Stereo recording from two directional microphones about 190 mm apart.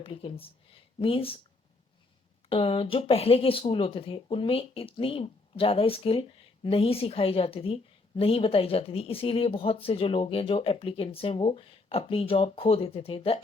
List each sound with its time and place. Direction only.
0.0 s a woman's voice: 30° left (ahead or behind)
2.5 s a woman's voice: 30° left (ahead or behind)